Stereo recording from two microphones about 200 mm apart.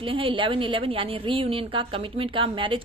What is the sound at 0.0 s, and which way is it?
A woman's voice, 25° right (ahead or behind).